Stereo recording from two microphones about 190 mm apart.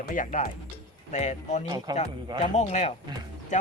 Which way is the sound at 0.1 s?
40° left (ahead or behind).